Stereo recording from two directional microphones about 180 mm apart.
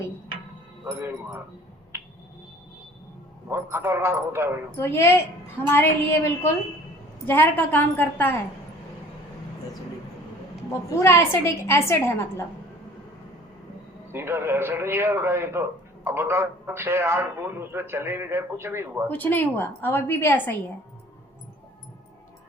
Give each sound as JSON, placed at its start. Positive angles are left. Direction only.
{"t": 0.9, "sound": "a man's voice", "side_deg": -15}
{"t": 3.5, "sound": "a man's voice", "side_deg": -15}
{"t": 4.8, "sound": "a woman's voice", "side_deg": 15}
{"t": 11.0, "sound": "a woman's voice", "side_deg": 15}
{"t": 14.1, "sound": "a man's voice", "side_deg": -10}
{"t": 19.0, "sound": "a woman's voice", "side_deg": 10}